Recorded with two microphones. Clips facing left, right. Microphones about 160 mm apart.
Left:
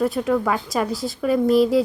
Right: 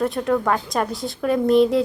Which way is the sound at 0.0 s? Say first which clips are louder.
Even; 5° left (ahead or behind).